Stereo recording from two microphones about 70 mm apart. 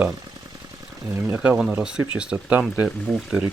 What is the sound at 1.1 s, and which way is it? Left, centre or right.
Speech, right.